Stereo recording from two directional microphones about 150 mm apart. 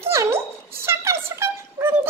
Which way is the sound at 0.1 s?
20° right (ahead or behind).